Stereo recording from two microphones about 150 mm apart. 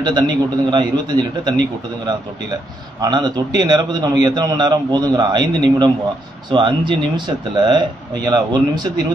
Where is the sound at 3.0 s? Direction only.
30° right (ahead or behind).